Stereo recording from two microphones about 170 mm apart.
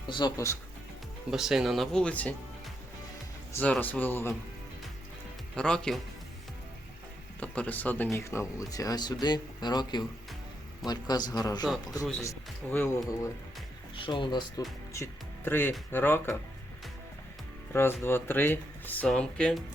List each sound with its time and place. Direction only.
0.1 s speech: 25° left (ahead or behind)
1.3 s speech: 5° right (ahead or behind)
3.5 s speech: 10° left (ahead or behind)
5.5 s speech: 5° left (ahead or behind)
7.3 s speech: 10° left (ahead or behind)
13.9 s speech: 30° left (ahead or behind)
14.9 s speech: 15° left (ahead or behind)
17.7 s speech: 15° left (ahead or behind)